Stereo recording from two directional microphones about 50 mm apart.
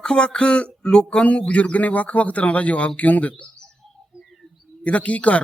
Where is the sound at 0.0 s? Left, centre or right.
Centre.